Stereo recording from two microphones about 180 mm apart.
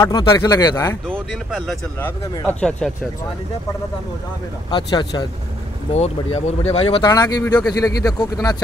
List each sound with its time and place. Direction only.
0.0 s speech: 20° left (ahead or behind)
1.0 s speech: 5° right (ahead or behind)
4.6 s speech: 25° left (ahead or behind)
5.9 s speech: 35° left (ahead or behind)
7.1 s speech: 20° left (ahead or behind)